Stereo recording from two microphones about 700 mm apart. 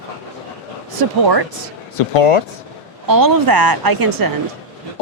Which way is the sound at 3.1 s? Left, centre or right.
Right.